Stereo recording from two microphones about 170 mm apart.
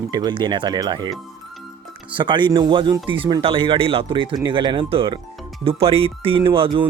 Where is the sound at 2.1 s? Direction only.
30° right (ahead or behind).